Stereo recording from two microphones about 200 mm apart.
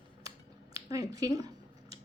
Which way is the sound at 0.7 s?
15° right (ahead or behind).